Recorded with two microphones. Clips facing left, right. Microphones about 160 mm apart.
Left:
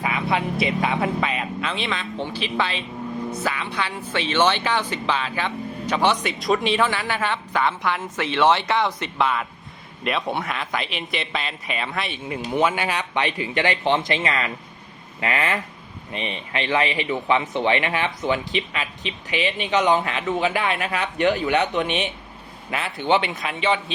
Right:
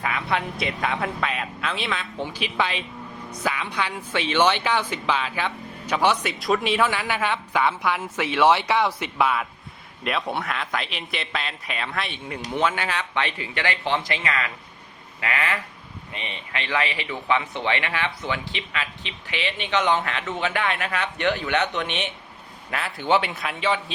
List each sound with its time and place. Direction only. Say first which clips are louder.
0.0 s a man's voice: left 2 dB; 10° left (ahead or behind)
22.7 s a man's voice: left 1 dB; centre (ahead or behind)